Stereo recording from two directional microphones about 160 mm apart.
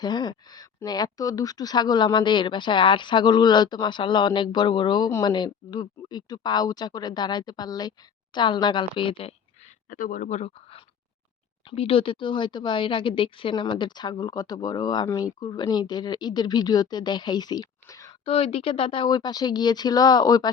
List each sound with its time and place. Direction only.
0.0 s speech: 25° left (ahead or behind)
9.9 s speech: 55° left (ahead or behind); by 18.1 s 20° left (ahead or behind)
18.3 s speech: 35° left (ahead or behind)